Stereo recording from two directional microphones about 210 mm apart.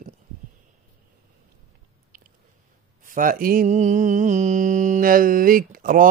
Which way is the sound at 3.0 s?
40° right (ahead or behind).